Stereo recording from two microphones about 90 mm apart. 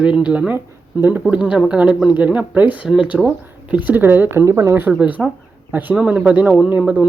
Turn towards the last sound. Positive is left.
turn(degrees=-15)  # may be behind; listen again after turning